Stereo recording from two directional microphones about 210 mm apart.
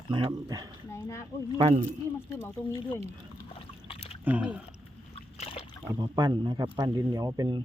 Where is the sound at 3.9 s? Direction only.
25° left (ahead or behind).